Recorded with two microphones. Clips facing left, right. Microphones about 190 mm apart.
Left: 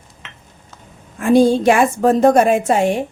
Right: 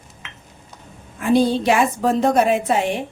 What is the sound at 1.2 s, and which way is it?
Speech, 45° left (ahead or behind).